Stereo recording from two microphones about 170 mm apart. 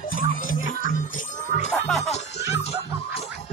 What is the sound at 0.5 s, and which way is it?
Music, 55° left (ahead or behind).